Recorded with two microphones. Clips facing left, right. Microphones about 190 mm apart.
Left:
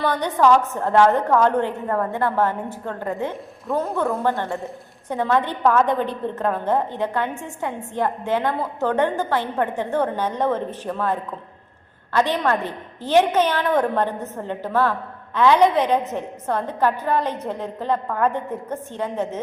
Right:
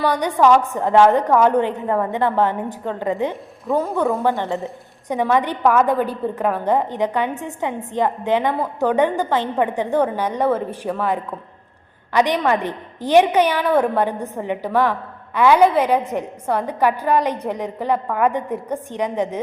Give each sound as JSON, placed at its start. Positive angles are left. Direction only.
{"t": 0.0, "sound": "a woman's voice", "side_deg": -10}
{"t": 3.7, "sound": "a woman's voice", "side_deg": 0}
{"t": 4.2, "sound": "a woman's voice", "side_deg": -15}